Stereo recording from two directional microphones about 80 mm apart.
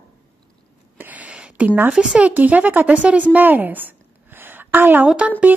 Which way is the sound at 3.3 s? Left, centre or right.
Right.